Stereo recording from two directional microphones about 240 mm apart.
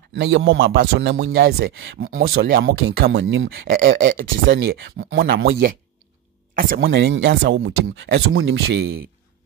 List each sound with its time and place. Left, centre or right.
0.1 s speech: right